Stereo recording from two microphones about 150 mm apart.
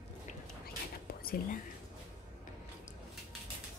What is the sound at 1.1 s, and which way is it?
Whispering, 85° left.